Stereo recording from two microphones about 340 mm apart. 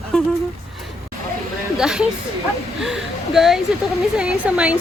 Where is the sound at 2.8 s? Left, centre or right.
Centre.